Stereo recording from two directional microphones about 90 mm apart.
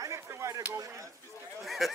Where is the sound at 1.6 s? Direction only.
Centre (ahead or behind).